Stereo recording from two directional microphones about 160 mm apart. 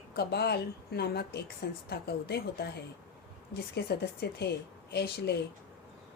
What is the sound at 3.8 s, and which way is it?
A woman's voice, 85° left.